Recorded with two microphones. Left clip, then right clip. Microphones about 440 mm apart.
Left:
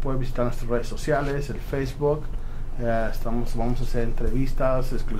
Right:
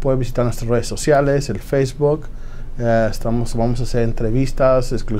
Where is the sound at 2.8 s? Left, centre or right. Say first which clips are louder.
Right 9 dB; right.